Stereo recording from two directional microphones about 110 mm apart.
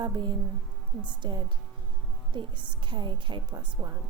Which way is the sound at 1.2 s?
40° right (ahead or behind).